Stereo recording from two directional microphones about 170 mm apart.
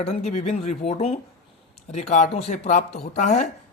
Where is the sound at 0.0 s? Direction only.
40° left (ahead or behind).